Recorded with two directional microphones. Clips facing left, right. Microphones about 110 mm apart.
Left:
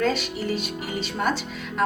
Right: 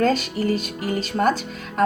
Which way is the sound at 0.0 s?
40° right (ahead or behind).